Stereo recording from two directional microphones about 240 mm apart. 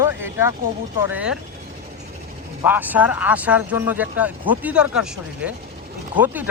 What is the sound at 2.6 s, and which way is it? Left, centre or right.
Speech, centre.